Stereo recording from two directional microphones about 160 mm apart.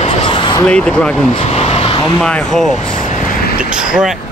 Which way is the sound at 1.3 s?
40° left (ahead or behind).